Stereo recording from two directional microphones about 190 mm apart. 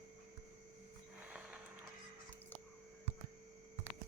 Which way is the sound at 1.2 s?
5° right (ahead or behind).